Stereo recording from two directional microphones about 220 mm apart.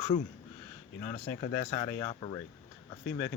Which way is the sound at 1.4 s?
20° left (ahead or behind).